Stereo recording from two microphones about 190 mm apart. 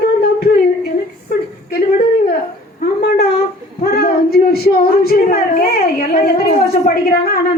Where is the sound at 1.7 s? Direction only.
50° left (ahead or behind).